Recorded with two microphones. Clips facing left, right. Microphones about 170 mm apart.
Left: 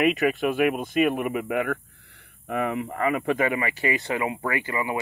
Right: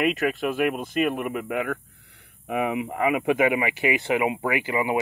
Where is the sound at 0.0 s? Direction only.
Centre (ahead or behind).